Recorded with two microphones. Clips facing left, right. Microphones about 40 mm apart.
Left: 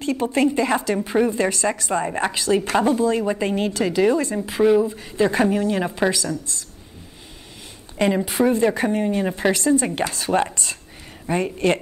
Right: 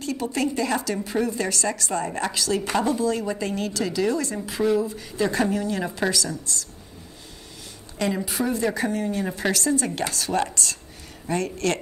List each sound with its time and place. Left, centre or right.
0.0 s a woman's voice: left
8.3 s a woman's voice: left